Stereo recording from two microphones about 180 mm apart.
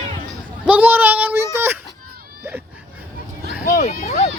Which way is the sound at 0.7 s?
10° right (ahead or behind).